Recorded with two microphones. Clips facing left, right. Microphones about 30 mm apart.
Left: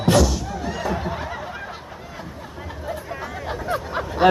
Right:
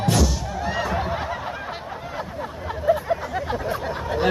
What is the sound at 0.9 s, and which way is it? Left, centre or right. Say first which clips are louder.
Snicker: right 2 dB; centre.